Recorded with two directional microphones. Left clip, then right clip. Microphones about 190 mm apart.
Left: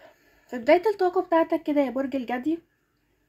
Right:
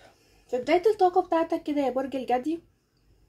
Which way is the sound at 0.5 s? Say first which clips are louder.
Left 2 dB; 50° left (ahead or behind).